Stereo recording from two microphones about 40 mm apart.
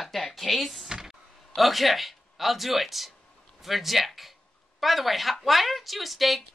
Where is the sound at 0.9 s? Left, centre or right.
Centre.